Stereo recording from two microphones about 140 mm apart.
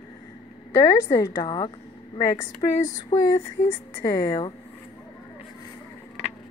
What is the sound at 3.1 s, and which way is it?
Speech, 45° left (ahead or behind).